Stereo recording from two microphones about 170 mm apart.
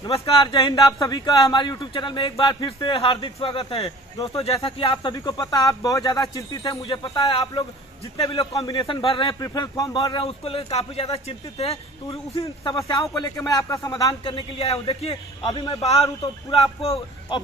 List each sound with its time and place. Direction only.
0.4 s speech: 25° left (ahead or behind)
10.2 s speech: 35° left (ahead or behind)
12.7 s speech: 20° left (ahead or behind); by 15.1 s 35° left (ahead or behind)
15.4 s speech: 25° left (ahead or behind)
15.8 s speech: 35° left (ahead or behind)